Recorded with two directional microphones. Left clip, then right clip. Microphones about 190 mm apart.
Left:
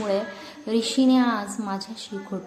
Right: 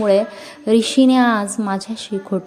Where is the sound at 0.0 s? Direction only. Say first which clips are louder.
Right 10 dB; 35° right (ahead or behind).